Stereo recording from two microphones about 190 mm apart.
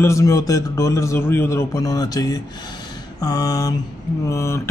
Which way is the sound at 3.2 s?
20° left (ahead or behind).